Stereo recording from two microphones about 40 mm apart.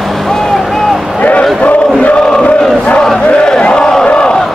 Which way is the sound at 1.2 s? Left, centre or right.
Left.